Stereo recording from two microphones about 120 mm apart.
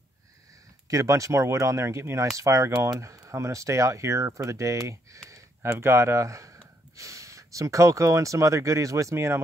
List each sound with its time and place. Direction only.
0.8 s speech: 25° right (ahead or behind)